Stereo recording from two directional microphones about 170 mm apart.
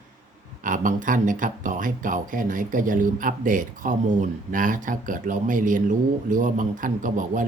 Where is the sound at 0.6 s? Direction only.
50° right (ahead or behind).